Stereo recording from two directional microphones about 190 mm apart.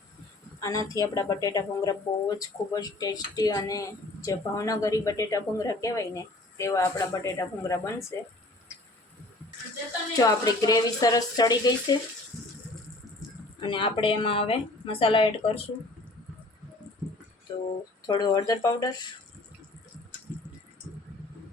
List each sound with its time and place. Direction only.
0.9 s speech: 20° left (ahead or behind)
10.2 s a woman's voice: 20° left (ahead or behind)
13.6 s a woman's voice: 25° left (ahead or behind)
17.5 s a woman's voice: 25° left (ahead or behind)